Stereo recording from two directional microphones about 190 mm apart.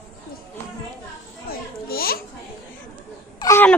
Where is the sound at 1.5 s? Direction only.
50° left (ahead or behind).